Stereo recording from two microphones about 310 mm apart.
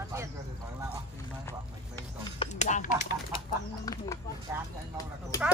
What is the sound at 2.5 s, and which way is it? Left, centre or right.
Speech, left.